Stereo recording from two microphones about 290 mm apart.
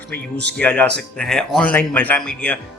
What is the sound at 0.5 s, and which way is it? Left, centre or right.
A man's voice, centre.